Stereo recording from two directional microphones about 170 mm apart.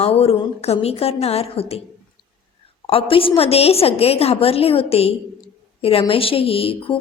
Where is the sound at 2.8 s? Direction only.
35° left (ahead or behind).